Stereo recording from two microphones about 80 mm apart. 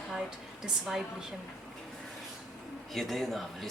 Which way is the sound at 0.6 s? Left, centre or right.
Centre.